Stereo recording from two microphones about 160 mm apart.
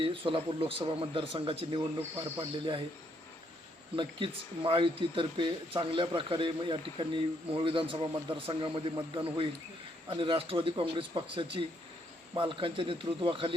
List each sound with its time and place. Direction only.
0.0 s speech: 35° right (ahead or behind)
3.9 s speech: 35° right (ahead or behind)